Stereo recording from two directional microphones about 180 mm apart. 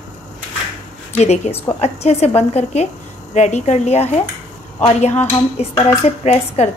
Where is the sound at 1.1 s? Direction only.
35° left (ahead or behind).